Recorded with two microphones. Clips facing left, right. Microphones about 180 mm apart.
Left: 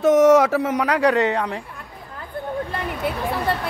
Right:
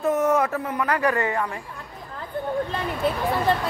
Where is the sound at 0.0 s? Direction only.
90° left.